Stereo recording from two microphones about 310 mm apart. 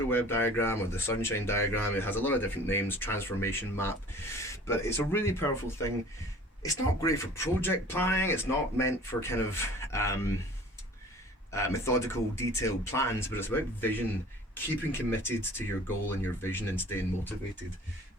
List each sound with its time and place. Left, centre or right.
0.1 s speech: centre
11.5 s speech: centre